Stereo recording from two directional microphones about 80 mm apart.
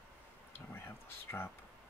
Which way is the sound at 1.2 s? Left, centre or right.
Left.